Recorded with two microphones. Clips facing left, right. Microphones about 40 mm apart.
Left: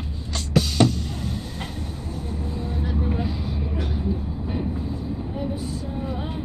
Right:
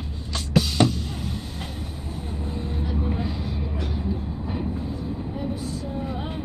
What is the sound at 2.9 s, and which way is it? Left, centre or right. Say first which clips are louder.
Vehicle: left 2 dB; centre.